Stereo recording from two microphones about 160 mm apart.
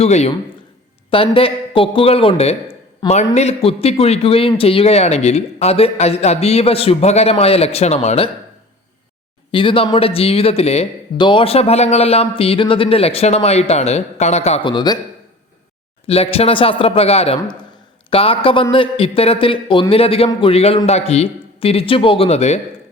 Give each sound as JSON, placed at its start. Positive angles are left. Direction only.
{"t": 0.0, "sound": "a man's voice", "side_deg": 40}
{"t": 3.0, "sound": "a man's voice", "side_deg": 25}
{"t": 3.3, "sound": "a man's voice", "side_deg": 40}
{"t": 9.5, "sound": "a man's voice", "side_deg": 35}
{"t": 14.6, "sound": "a man's voice", "side_deg": 30}
{"t": 16.0, "sound": "a man's voice", "side_deg": 40}